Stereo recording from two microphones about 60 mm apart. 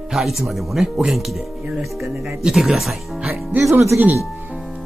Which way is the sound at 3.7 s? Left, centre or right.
Right.